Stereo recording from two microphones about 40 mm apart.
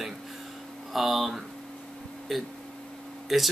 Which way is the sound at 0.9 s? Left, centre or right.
Centre.